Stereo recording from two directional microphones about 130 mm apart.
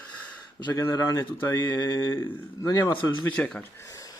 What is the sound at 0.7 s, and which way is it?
A man's voice, 20° left (ahead or behind).